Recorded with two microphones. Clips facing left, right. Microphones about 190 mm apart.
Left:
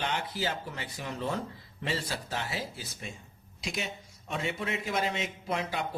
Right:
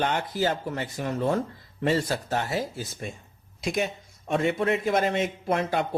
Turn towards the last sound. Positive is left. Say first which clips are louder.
# right 7 dB
turn(degrees=-55)  # may be behind; listen again after turning